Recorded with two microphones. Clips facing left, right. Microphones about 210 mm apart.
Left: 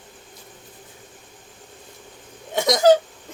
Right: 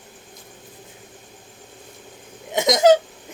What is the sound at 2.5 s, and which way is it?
Hiccup, 20° right (ahead or behind).